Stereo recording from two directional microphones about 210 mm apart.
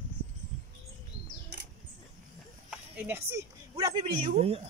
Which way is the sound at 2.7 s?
10° right (ahead or behind).